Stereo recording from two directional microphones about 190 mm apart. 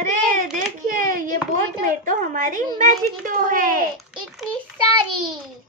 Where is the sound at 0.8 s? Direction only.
45° right (ahead or behind).